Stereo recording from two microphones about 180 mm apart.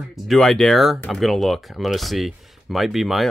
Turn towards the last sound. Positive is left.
turn(degrees=0)  # may be behind; listen again after turning